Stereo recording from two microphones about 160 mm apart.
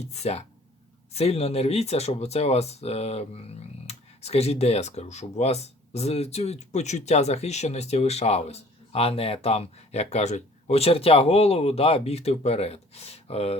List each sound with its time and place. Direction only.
0.0 s speech: 45° left (ahead or behind)